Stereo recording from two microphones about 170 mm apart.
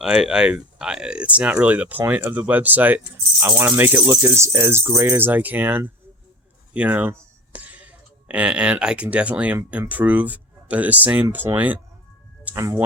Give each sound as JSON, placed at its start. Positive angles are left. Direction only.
{"t": 0.0, "sound": "speech", "side_deg": -5}